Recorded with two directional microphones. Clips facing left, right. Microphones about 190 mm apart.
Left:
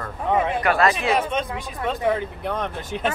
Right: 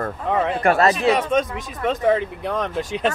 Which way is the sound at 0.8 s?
40° right (ahead or behind).